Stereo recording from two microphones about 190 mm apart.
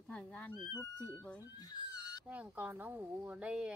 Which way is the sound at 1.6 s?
20° left (ahead or behind).